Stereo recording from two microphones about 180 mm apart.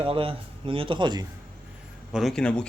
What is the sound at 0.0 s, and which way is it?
Speech, 30° right (ahead or behind).